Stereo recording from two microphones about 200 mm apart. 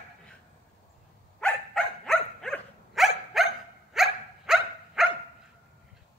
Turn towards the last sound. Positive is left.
turn(degrees=0)  # may be behind; listen again after turning